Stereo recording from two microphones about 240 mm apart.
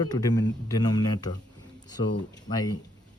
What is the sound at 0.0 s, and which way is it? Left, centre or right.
Speech, centre.